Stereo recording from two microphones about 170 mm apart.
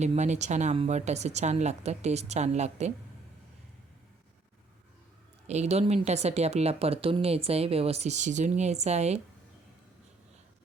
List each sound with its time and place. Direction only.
0.0 s speech: 40° right (ahead or behind)
5.5 s speech: 40° right (ahead or behind)